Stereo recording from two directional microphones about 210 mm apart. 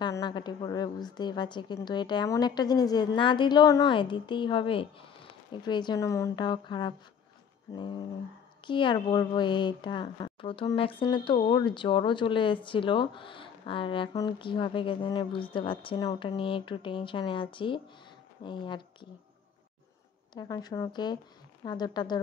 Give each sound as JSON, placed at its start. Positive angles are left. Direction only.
{"t": 0.0, "sound": "speech", "side_deg": 20}
{"t": 7.7, "sound": "a sound", "side_deg": 15}
{"t": 8.6, "sound": "speech", "side_deg": 25}
{"t": 20.3, "sound": "speech", "side_deg": 20}